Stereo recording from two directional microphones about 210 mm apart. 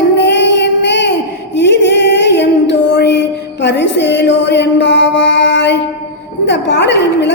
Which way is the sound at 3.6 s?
55° left (ahead or behind).